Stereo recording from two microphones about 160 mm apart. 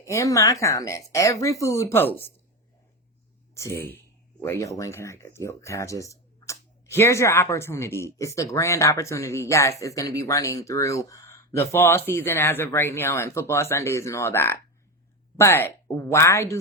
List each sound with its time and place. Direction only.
0.0 s speech: 20° left (ahead or behind)
3.5 s speech: 15° left (ahead or behind)